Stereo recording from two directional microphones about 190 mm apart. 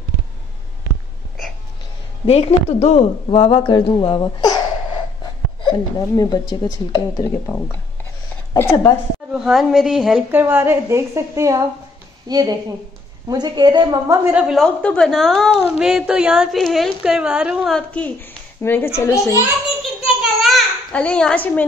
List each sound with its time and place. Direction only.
2.2 s speech: 35° left (ahead or behind)
5.6 s speech: 20° left (ahead or behind)
8.5 s a child's voice: 15° left (ahead or behind)
9.3 s a woman's voice: centre (ahead or behind); by 14.3 s 20° right (ahead or behind)
14.3 s a woman's voice: centre (ahead or behind); by 19.4 s 15° left (ahead or behind)
19.8 s a sound: centre (ahead or behind)